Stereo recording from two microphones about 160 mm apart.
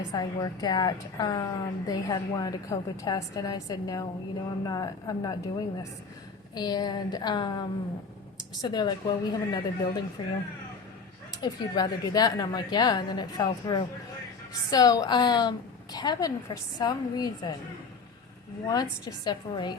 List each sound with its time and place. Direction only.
0.1 s a woman's voice: 25° left (ahead or behind)
8.6 s a woman's voice: 25° left (ahead or behind)
11.3 s a woman's voice: 25° left (ahead or behind)
18.7 s a woman's voice: 25° left (ahead or behind)